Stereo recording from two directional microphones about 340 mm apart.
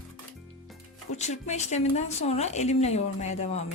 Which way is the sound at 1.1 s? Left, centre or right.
Centre.